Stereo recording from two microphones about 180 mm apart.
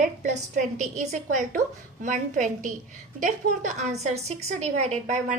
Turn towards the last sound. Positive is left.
turn(degrees=-40)  # may be behind; listen again after turning